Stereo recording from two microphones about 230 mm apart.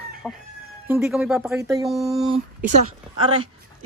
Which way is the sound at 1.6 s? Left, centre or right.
Centre.